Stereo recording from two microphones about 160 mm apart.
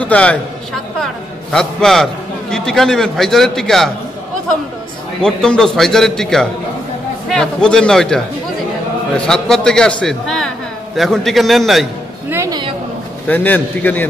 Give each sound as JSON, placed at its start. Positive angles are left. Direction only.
{"t": 0.0, "sound": "a man's voice", "side_deg": 5}
{"t": 0.9, "sound": "a sound", "side_deg": 5}
{"t": 2.5, "sound": "a man's voice", "side_deg": 5}
{"t": 5.2, "sound": "a man's voice", "side_deg": 5}
{"t": 12.3, "sound": "a sound", "side_deg": -15}
{"t": 13.3, "sound": "a man's voice", "side_deg": 10}